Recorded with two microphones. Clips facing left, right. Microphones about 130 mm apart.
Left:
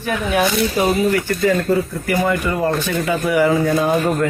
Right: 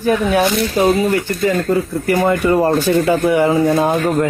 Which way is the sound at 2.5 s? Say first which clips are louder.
Right 6 dB; 40° right (ahead or behind).